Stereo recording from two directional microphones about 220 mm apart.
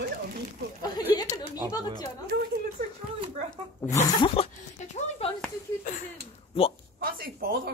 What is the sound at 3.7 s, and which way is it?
Speech, 15° left (ahead or behind).